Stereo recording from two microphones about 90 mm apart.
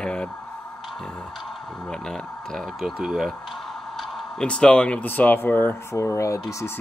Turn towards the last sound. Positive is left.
turn(degrees=35)  # may be behind; listen again after turning